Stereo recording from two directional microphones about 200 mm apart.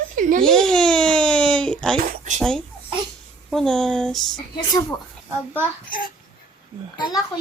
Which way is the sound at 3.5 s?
Centre (ahead or behind).